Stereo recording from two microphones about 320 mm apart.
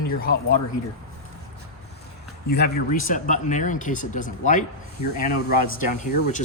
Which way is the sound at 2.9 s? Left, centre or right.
Left.